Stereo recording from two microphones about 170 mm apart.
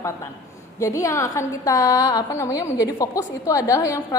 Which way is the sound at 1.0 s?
20° left (ahead or behind).